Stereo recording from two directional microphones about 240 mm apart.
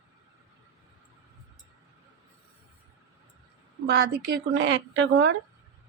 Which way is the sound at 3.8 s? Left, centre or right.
Right.